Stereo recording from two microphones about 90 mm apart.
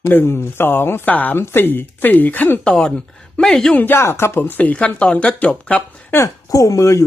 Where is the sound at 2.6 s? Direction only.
5° left (ahead or behind).